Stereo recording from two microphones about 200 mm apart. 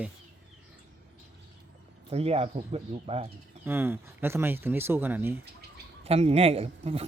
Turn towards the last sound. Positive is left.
turn(degrees=-30)  # may be behind; listen again after turning